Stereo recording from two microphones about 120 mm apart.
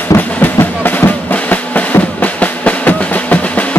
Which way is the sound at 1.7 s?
15° left (ahead or behind).